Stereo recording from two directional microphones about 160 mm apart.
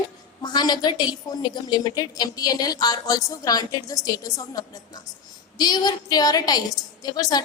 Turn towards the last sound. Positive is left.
turn(degrees=25)  # may be behind; listen again after turning